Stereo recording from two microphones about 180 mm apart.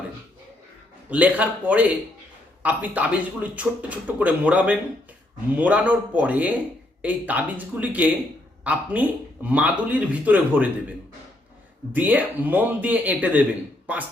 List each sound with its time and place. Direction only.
1.1 s a man's voice: 10° right (ahead or behind)
11.9 s a man's voice: 10° right (ahead or behind)